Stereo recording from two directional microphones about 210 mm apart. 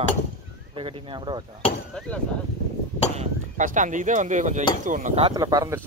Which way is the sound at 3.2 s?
35° right (ahead or behind).